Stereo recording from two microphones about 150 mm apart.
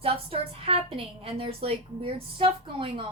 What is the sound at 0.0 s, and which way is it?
A woman's voice, 40° right (ahead or behind).